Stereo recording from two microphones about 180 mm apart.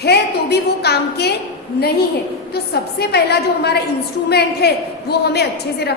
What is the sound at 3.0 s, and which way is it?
A woman's voice, 65° left (ahead or behind).